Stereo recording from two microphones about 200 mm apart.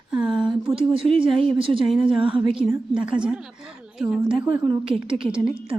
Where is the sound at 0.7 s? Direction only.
25° right (ahead or behind).